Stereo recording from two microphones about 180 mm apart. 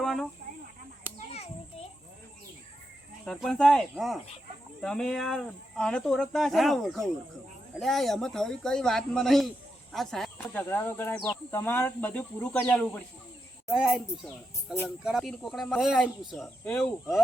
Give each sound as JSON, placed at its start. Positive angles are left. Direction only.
{"t": 0.0, "sound": "snake", "side_deg": 0}
{"t": 1.3, "sound": "children playing", "side_deg": 35}
{"t": 3.2, "sound": "speech", "side_deg": 5}